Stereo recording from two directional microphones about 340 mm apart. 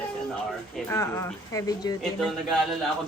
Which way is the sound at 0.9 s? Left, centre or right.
Centre.